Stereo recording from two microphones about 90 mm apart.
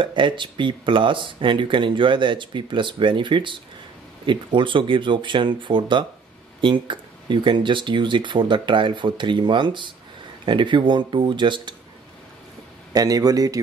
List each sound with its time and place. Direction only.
0.0 s speech: 65° right (ahead or behind)
12.9 s a man's voice: 45° right (ahead or behind)